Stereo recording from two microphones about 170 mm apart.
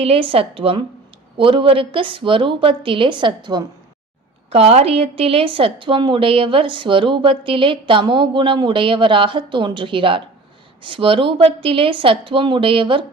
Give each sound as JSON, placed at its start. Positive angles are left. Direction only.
{"t": 0.0, "sound": "a woman's voice", "side_deg": -35}
{"t": 4.4, "sound": "a woman's voice", "side_deg": -40}